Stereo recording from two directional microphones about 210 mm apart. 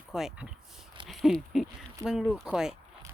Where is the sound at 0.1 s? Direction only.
Centre (ahead or behind).